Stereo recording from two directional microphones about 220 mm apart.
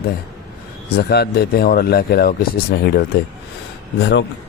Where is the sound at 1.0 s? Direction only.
45° left (ahead or behind).